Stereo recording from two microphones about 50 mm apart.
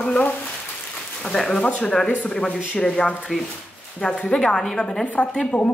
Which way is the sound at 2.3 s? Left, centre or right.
Centre.